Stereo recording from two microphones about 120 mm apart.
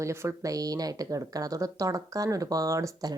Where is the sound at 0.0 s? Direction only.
20° right (ahead or behind).